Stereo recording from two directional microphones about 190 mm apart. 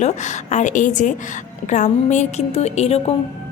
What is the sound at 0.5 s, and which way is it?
A woman's voice, 40° left (ahead or behind).